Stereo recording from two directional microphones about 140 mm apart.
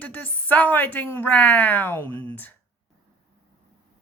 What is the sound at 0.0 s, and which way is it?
A woman's voice, 10° left (ahead or behind).